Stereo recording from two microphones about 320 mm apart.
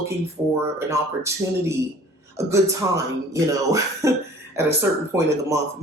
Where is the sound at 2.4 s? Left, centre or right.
Centre.